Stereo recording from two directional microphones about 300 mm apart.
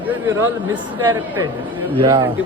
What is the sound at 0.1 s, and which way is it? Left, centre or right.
Speech, centre.